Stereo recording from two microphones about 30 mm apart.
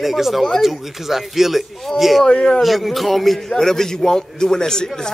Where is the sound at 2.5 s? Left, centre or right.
Centre.